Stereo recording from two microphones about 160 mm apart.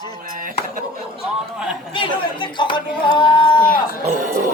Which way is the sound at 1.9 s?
30° left (ahead or behind).